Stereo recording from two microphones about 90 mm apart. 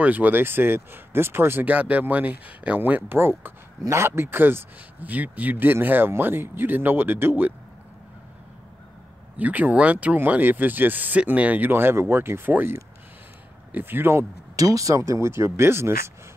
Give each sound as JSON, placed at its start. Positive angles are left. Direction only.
{"t": 0.0, "sound": "speech", "side_deg": -20}
{"t": 9.4, "sound": "speech", "side_deg": -20}
{"t": 14.5, "sound": "speech", "side_deg": -40}